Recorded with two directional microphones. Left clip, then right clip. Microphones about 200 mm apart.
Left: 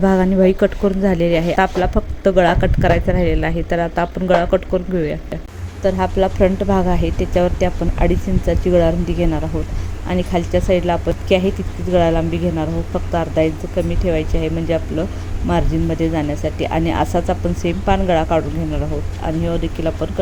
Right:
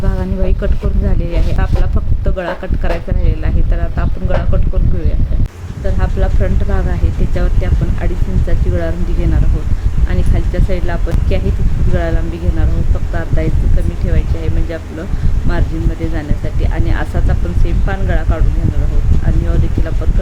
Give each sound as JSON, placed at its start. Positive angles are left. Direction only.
{"t": 0.0, "sound": "speech", "side_deg": 30}
{"t": 5.8, "sound": "speech", "side_deg": 25}
{"t": 10.1, "sound": "speech", "side_deg": 20}
{"t": 16.1, "sound": "speech", "side_deg": 25}